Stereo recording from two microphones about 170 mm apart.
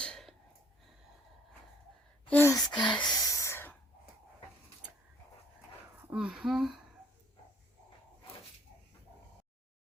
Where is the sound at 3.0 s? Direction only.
20° left (ahead or behind).